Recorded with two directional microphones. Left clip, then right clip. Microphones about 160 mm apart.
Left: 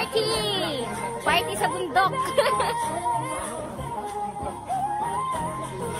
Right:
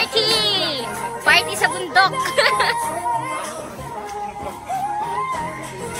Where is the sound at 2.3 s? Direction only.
10° left (ahead or behind).